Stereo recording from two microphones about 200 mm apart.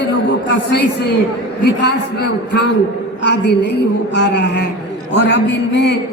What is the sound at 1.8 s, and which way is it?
A man's voice, 55° left (ahead or behind).